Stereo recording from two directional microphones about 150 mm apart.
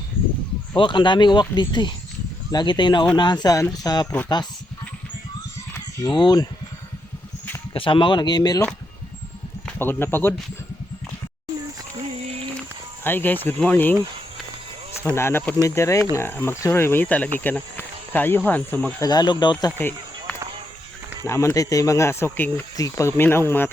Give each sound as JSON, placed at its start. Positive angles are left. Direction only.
{"t": 0.8, "sound": "speech", "side_deg": 30}
{"t": 6.0, "sound": "speech", "side_deg": 30}
{"t": 7.7, "sound": "speech", "side_deg": 35}
{"t": 9.6, "sound": "speech", "side_deg": 15}
{"t": 13.1, "sound": "speech", "side_deg": 15}
{"t": 15.0, "sound": "speech", "side_deg": 15}
{"t": 19.0, "sound": "speech", "side_deg": 30}
{"t": 20.3, "sound": "music", "side_deg": 10}
{"t": 21.2, "sound": "speech", "side_deg": 20}